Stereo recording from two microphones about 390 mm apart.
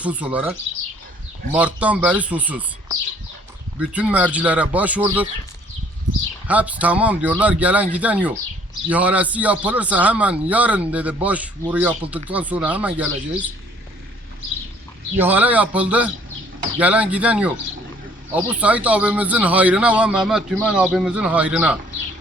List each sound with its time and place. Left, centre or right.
0.0 s a man's voice: centre
1.5 s a man's voice: centre
6.5 s a man's voice: centre
15.2 s a man's voice: centre